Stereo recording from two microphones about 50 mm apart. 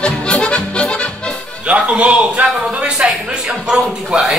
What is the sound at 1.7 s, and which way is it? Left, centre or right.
A man's voice, right.